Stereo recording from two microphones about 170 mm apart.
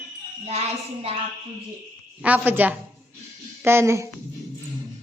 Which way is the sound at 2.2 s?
10° right (ahead or behind).